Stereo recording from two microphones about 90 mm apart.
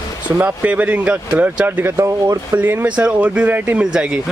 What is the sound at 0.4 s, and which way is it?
Speech, 20° right (ahead or behind).